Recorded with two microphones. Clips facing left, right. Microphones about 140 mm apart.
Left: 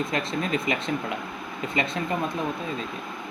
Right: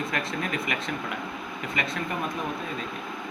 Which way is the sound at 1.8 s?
25° left (ahead or behind).